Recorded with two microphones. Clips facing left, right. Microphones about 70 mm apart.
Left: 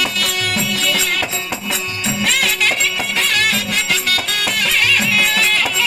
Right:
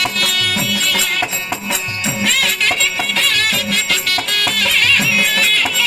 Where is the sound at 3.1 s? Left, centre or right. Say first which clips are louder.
Left 2 dB; left.